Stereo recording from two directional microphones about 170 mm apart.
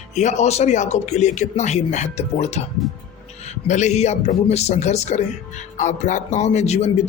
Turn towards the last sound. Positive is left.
turn(degrees=40)  # may be behind; listen again after turning